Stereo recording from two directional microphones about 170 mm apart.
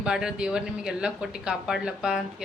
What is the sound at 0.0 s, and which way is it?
A woman's voice, 5° right (ahead or behind).